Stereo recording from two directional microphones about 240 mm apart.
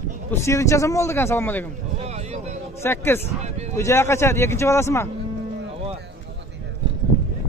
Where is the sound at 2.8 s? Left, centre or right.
Centre.